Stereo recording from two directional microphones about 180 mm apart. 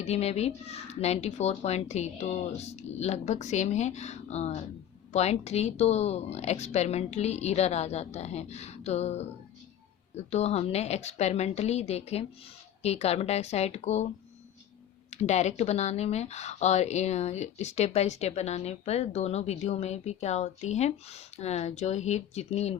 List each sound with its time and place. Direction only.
0.0 s speech: 35° left (ahead or behind)
10.2 s speech: 35° left (ahead or behind)
15.1 s speech: 40° left (ahead or behind)